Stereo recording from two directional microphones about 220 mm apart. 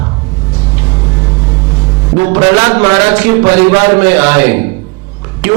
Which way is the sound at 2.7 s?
30° right (ahead or behind).